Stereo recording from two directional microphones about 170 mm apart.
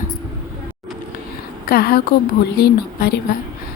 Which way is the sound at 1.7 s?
65° left (ahead or behind).